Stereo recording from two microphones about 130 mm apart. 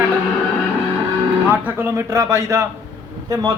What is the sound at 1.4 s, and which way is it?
A man's voice, 15° right (ahead or behind).